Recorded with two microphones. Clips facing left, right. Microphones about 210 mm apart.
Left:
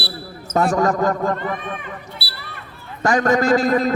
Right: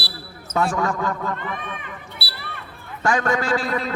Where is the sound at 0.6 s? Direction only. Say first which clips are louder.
Left 5 dB; 40° left (ahead or behind).